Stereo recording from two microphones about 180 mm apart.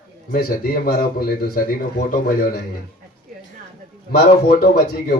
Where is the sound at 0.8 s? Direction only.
55° left (ahead or behind).